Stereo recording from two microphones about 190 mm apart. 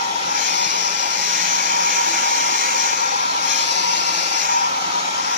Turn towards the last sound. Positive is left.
turn(degrees=-40)  # may be behind; listen again after turning